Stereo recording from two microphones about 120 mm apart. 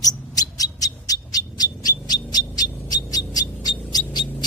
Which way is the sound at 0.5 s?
30° left (ahead or behind).